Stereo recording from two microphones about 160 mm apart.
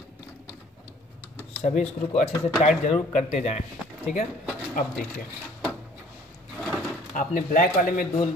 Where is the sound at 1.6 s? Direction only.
45° left (ahead or behind).